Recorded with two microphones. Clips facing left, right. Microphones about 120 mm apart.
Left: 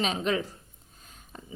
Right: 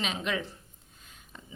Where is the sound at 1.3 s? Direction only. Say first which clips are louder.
Left 4 dB; 45° left (ahead or behind).